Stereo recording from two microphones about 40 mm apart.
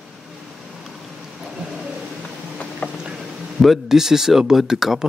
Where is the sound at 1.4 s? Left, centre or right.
Centre.